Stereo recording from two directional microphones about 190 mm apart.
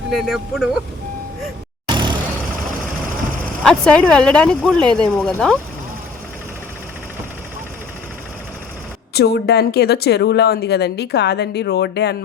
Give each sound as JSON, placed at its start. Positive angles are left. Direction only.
{"t": 0.1, "sound": "speech", "side_deg": 0}
{"t": 1.9, "sound": "vehicle", "side_deg": -25}
{"t": 3.6, "sound": "speech", "side_deg": 5}
{"t": 9.1, "sound": "speech", "side_deg": 60}